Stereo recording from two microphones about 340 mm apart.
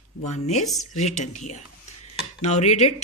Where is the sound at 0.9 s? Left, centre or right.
Centre.